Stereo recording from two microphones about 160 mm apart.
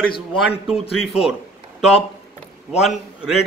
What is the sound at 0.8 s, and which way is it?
Speech, 40° left (ahead or behind).